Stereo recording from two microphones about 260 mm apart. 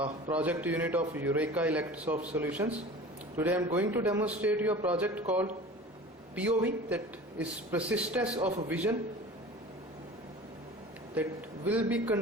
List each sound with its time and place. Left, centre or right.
0.3 s a man's voice: centre
11.1 s a man's voice: centre